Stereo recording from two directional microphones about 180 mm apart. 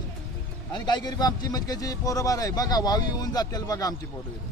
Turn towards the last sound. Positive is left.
turn(degrees=20)  # may be behind; listen again after turning